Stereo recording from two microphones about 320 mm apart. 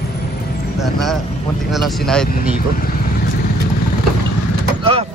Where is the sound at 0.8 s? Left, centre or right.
Centre.